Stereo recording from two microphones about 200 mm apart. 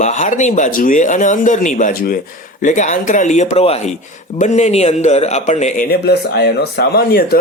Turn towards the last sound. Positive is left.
turn(degrees=50)  # may be behind; listen again after turning